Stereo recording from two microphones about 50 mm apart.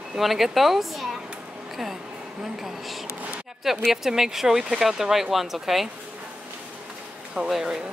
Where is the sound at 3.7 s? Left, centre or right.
Centre.